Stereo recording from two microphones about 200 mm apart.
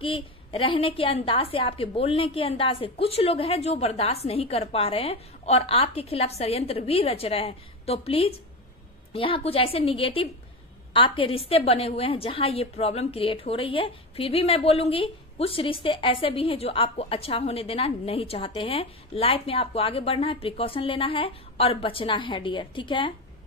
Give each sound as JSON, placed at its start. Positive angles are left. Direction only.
{"t": 0.0, "sound": "a woman's voice", "side_deg": 25}